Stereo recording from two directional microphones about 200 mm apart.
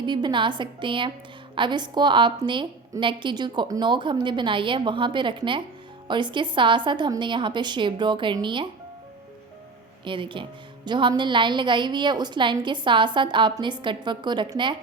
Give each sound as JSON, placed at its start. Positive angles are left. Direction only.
{"t": 0.0, "sound": "a woman's voice", "side_deg": -20}
{"t": 10.0, "sound": "a woman's voice", "side_deg": -25}